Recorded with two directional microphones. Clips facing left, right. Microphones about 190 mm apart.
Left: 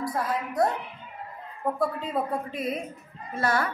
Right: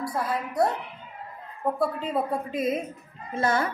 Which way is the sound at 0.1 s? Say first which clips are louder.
Even; centre (ahead or behind).